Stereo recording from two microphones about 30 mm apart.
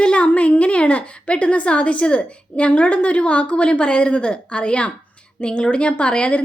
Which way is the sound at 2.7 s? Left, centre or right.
Left.